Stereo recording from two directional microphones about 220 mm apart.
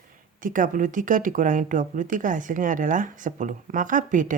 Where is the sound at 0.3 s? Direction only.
40° right (ahead or behind).